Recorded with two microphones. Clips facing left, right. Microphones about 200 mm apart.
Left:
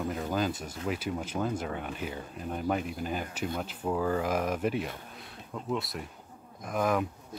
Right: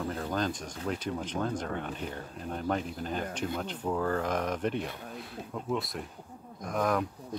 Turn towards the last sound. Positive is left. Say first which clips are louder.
# left 1 dB
turn(degrees=5)  # may be behind; listen again after turning